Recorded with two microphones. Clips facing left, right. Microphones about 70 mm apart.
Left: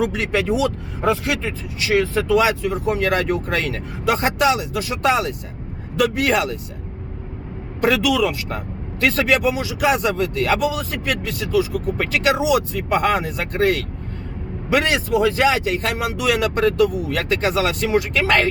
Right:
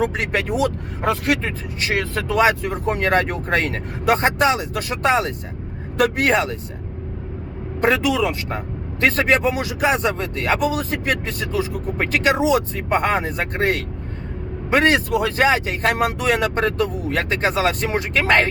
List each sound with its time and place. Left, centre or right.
0.0 s speech: right
4.7 s speech: right
5.0 s speech: right
7.8 s speech: right
9.8 s speech: right
10.7 s speech: right
12.1 s speech: right